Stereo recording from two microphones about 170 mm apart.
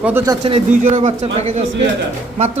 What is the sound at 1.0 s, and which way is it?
Speech, 40° right (ahead or behind).